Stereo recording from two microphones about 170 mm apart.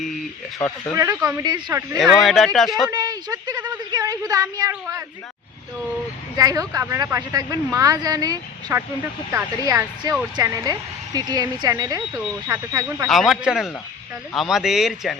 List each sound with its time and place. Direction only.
0.9 s speech: 20° right (ahead or behind)
2.0 s speech: centre (ahead or behind)
2.9 s speech: 20° right (ahead or behind)
6.3 s speech: 20° right (ahead or behind)
13.1 s speech: centre (ahead or behind)